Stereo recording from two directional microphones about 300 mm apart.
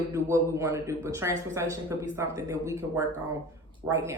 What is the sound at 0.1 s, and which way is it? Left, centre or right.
A man's voice, centre.